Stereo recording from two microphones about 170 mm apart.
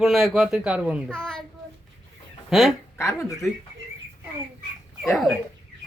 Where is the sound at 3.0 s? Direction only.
15° left (ahead or behind).